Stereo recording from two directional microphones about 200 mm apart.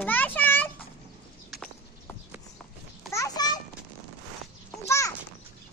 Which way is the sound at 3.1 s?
15° left (ahead or behind).